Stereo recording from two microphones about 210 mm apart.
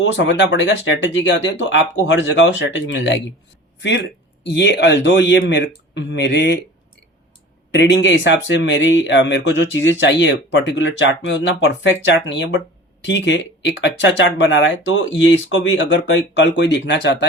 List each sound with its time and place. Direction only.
0.0 s speech: 60° left (ahead or behind)
7.7 s speech: 55° left (ahead or behind)